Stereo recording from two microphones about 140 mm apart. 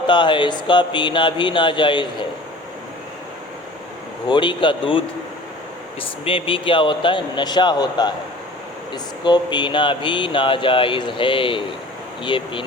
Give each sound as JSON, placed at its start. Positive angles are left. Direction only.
{"t": 0.1, "sound": "speech", "side_deg": 35}
{"t": 4.3, "sound": "speech", "side_deg": 35}
{"t": 9.2, "sound": "speech", "side_deg": 35}